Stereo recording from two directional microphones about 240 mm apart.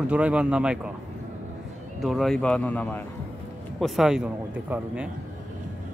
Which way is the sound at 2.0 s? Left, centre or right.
Centre.